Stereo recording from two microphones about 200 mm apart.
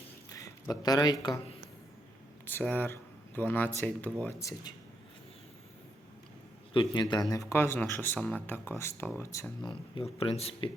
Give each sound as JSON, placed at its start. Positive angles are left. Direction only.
{"t": 0.3, "sound": "a sound", "side_deg": 15}
{"t": 1.2, "sound": "speech", "side_deg": 20}
{"t": 2.5, "sound": "speech", "side_deg": 10}
{"t": 6.7, "sound": "speech", "side_deg": 25}
{"t": 9.6, "sound": "speech", "side_deg": 25}